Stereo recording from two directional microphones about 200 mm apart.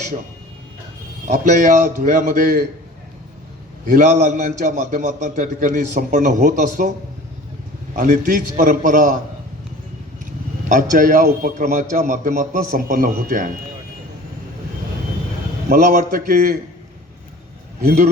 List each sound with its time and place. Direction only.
1.3 s a man's voice: 40° right (ahead or behind)
3.8 s a man's voice: 40° right (ahead or behind)
7.9 s a man's voice: 40° right (ahead or behind)
10.7 s a man's voice: 40° right (ahead or behind)
15.7 s a man's voice: 40° right (ahead or behind)
17.8 s a man's voice: 40° right (ahead or behind)